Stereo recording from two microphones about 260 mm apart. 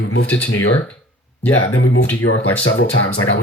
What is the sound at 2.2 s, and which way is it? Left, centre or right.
Speech, left.